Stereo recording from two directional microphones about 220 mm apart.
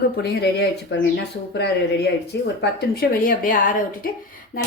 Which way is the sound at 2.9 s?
40° left (ahead or behind).